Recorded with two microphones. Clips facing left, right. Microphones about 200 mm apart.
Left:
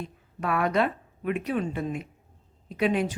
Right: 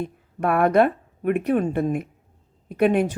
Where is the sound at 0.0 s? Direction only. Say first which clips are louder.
Right 7 dB; 55° right (ahead or behind).